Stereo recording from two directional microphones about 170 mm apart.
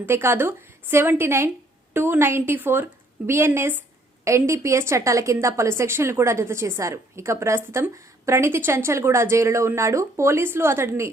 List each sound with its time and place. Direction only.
0.0 s a woman's voice: 15° right (ahead or behind)